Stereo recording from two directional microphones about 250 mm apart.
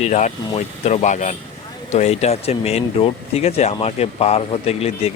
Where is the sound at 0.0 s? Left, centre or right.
Left.